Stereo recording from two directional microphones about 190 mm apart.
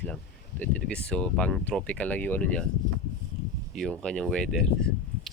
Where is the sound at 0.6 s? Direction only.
5° left (ahead or behind).